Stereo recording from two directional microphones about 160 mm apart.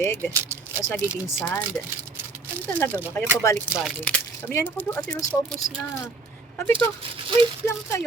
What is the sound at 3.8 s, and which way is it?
Speech, 5° right (ahead or behind).